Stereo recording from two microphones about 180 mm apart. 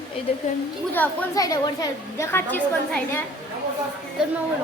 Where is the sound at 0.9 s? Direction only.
15° left (ahead or behind).